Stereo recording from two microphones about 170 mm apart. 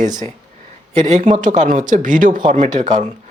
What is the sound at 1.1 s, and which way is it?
Speech, 45° right (ahead or behind).